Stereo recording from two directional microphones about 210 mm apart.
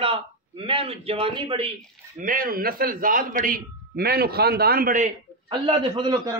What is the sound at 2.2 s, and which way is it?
A man's voice, 40° right (ahead or behind).